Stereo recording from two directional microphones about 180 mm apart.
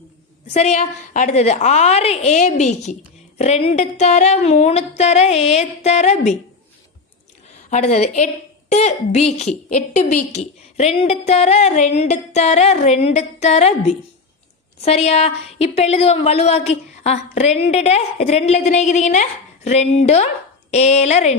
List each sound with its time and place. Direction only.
0.4 s a woman's voice: 35° left (ahead or behind)
7.7 s a woman's voice: 40° left (ahead or behind)